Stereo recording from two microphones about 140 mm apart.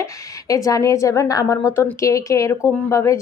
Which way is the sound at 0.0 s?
25° left (ahead or behind).